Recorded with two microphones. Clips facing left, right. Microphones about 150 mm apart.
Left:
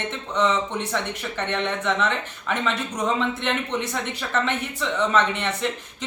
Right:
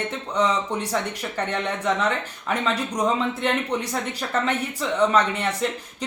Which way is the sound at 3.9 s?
40° right (ahead or behind).